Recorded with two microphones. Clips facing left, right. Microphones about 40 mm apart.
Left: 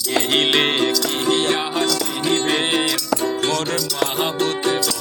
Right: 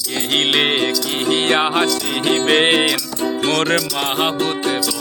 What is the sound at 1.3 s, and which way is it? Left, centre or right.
Music, right.